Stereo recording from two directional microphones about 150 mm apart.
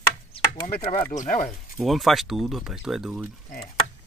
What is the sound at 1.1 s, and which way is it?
Speech, 60° left (ahead or behind).